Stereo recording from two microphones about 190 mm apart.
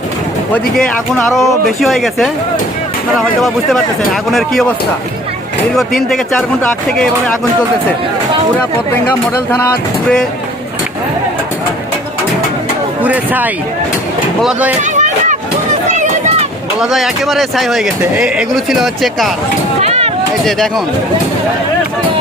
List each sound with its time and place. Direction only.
0.5 s speech: 5° left (ahead or behind)
6.1 s speech: 5° left (ahead or behind)
9.5 s speech: 15° left (ahead or behind)
13.0 s speech: 10° right (ahead or behind)
14.8 s a sound: 40° right (ahead or behind)
15.9 s run: 40° right (ahead or behind)
16.8 s speech: centre (ahead or behind)
19.8 s a sound: 35° right (ahead or behind)
20.4 s speech: centre (ahead or behind)